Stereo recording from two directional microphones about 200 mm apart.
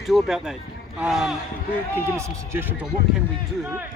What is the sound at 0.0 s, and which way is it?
Speech, centre (ahead or behind).